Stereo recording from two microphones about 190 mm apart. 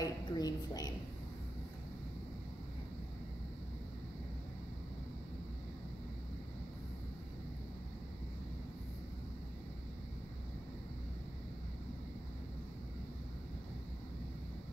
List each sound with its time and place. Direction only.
0.0 s a woman's voice: 20° left (ahead or behind)